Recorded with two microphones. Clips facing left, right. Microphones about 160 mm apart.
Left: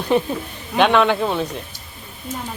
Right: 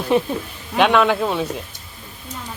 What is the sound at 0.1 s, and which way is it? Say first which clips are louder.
Speech: even; centre (ahead or behind).